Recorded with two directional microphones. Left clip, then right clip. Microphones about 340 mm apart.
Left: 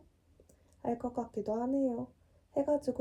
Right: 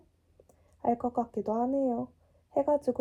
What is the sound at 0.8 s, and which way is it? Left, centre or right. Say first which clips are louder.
Speech: right 7 dB; centre.